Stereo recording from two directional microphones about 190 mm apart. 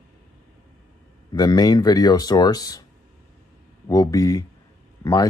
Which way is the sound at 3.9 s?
20° left (ahead or behind).